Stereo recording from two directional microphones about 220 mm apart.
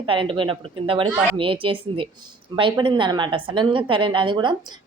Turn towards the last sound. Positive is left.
turn(degrees=-20)  # may be behind; listen again after turning